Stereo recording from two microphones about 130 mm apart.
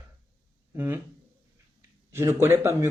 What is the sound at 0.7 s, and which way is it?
Speech, 15° right (ahead or behind).